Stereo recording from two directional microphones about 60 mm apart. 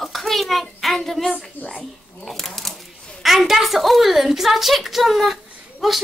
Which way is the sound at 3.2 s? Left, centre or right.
Centre.